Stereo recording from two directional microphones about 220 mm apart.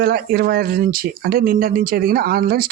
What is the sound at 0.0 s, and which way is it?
Speech, 40° right (ahead or behind).